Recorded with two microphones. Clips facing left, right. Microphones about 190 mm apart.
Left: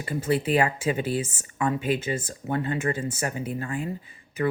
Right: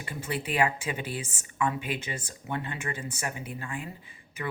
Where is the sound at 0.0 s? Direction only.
40° left (ahead or behind).